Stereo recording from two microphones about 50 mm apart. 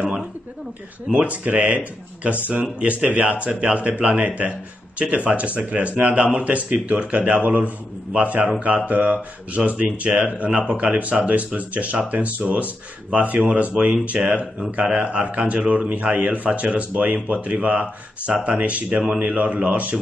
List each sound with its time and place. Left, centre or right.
1.2 s speech: right